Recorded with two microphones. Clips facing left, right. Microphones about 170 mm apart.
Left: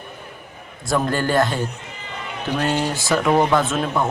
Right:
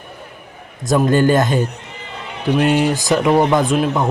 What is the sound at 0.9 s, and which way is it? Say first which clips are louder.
Speech: right 7 dB; 20° right (ahead or behind).